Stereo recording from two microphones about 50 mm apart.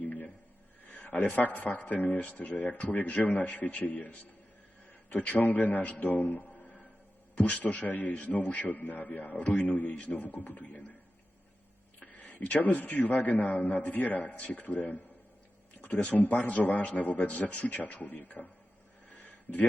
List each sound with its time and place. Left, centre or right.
0.0 s a sound: left
0.9 s a man's voice: left
8.7 s speech: left
11.9 s speech: left
16.1 s speech: left
19.1 s a sound: left